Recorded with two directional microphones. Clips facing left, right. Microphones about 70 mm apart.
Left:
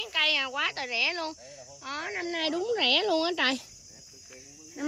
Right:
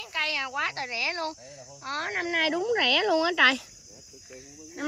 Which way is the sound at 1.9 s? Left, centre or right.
Right.